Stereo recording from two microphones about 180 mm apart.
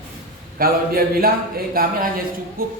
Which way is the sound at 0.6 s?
55° right (ahead or behind).